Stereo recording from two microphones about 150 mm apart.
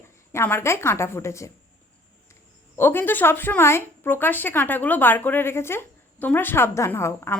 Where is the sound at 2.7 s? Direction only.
15° left (ahead or behind).